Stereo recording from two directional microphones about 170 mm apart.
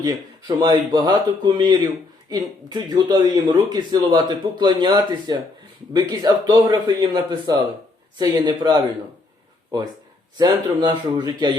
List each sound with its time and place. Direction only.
0.0 s a man's voice: 25° right (ahead or behind)